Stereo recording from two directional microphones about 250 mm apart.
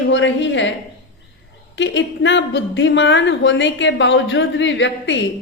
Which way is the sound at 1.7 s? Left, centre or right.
Left.